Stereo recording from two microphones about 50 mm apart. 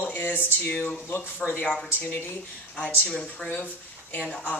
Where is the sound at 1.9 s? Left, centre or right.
Left.